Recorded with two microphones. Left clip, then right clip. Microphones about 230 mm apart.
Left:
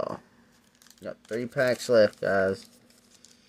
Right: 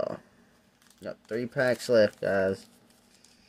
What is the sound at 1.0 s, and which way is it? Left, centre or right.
Speech, centre.